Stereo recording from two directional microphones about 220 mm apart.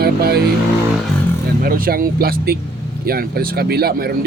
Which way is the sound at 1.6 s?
40° right (ahead or behind).